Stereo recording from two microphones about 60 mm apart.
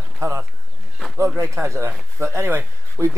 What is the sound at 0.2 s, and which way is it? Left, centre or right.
Speech, right.